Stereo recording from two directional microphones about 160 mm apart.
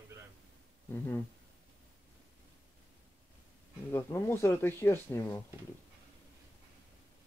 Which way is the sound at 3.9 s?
15° left (ahead or behind).